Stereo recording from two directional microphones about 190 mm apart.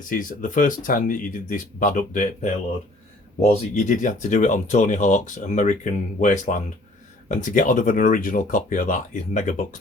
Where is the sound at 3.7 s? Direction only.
40° left (ahead or behind).